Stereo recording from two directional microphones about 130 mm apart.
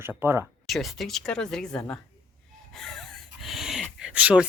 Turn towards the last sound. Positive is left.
turn(degrees=-10)  # may be behind; listen again after turning